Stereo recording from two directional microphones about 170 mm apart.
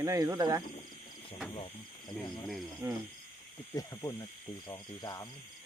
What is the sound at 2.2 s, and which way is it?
Speech, 25° left (ahead or behind).